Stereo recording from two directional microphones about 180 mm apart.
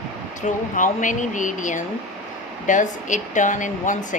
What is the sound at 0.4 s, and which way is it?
Speech, 45° left (ahead or behind).